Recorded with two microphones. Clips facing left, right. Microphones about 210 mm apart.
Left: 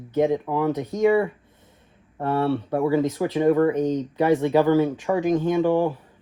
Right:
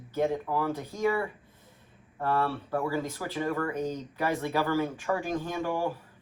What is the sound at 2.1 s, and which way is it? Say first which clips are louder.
Speech: left 6 dB; 25° left (ahead or behind).